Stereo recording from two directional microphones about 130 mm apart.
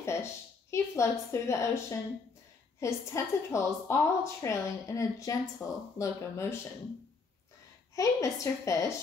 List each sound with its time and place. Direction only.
0.0 s a woman's voice: 20° left (ahead or behind)
5.6 s speech: 5° right (ahead or behind)
5.9 s a woman's voice: 20° left (ahead or behind)
7.9 s a woman's voice: 25° left (ahead or behind)